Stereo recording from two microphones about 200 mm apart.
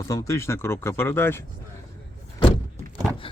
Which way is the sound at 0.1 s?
15° left (ahead or behind).